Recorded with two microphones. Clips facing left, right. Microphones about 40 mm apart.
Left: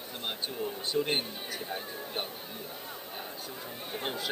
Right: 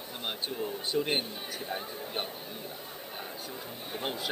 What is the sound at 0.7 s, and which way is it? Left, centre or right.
Speech, centre.